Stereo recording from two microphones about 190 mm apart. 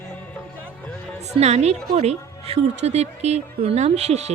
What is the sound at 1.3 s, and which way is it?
Speech, 35° right (ahead or behind).